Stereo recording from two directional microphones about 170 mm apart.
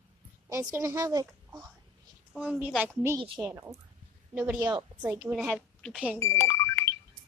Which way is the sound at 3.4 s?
15° right (ahead or behind).